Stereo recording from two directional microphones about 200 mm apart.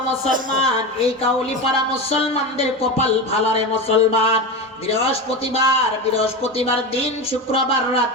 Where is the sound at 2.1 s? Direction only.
30° left (ahead or behind).